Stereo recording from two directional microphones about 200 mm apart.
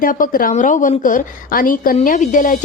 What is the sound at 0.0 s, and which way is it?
A woman's voice, 45° left (ahead or behind).